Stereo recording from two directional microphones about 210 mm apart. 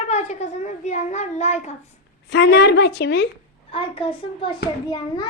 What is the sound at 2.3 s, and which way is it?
Speech, 55° left (ahead or behind).